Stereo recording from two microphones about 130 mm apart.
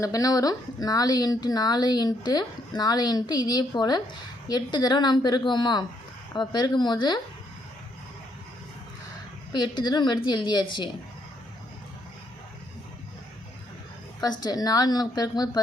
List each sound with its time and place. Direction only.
0.0 s speech: 25° left (ahead or behind)
9.5 s speech: 35° left (ahead or behind)
14.2 s speech: 30° left (ahead or behind)